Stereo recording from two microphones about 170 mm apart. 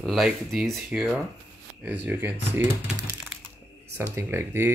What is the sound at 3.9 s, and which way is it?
Speech, 15° right (ahead or behind).